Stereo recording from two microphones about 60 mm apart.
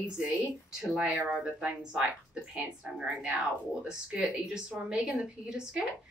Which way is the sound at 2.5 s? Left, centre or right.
Centre.